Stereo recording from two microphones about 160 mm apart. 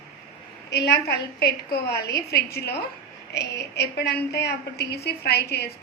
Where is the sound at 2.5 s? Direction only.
90° left.